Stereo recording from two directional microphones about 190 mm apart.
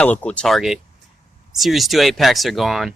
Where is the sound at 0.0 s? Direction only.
5° left (ahead or behind).